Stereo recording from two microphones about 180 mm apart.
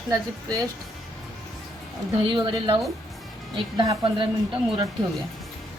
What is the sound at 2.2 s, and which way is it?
A woman's voice, 25° right (ahead or behind).